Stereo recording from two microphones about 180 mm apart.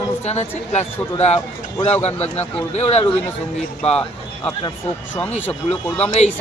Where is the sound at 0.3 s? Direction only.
40° left (ahead or behind).